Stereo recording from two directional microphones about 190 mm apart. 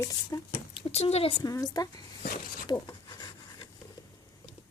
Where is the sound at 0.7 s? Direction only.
30° left (ahead or behind).